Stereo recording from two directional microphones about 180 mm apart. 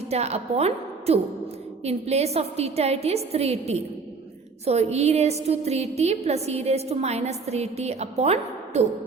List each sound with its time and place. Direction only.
0.1 s a woman's voice: 35° right (ahead or behind)